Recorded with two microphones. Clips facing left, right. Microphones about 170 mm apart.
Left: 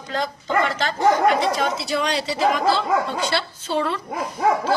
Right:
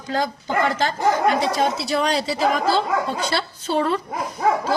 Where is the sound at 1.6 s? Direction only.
35° right (ahead or behind).